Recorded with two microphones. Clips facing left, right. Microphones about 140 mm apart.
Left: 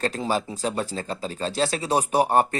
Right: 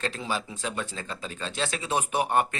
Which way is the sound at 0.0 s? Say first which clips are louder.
Left 6 dB; 40° left (ahead or behind).